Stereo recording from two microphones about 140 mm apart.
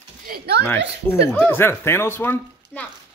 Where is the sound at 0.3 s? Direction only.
90° right.